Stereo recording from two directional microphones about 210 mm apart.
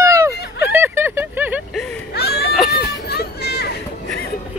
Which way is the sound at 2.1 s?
50° left (ahead or behind).